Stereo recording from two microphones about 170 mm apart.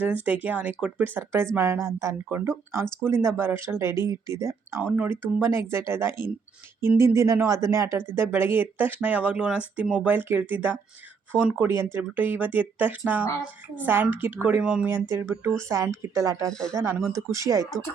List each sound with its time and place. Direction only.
0.3 s speech: 10° right (ahead or behind)
16.5 s speech: 5° left (ahead or behind)
16.7 s speech: 15° right (ahead or behind)